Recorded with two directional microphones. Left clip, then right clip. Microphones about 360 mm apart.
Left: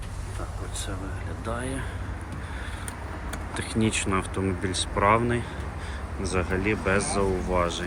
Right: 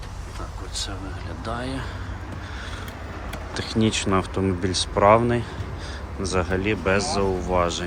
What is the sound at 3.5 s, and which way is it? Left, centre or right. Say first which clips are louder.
Speech: right 4 dB; centre.